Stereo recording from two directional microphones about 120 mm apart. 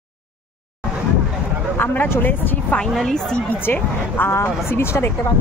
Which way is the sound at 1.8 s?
15° left (ahead or behind).